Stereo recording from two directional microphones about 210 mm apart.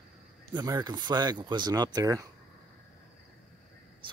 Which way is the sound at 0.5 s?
20° right (ahead or behind).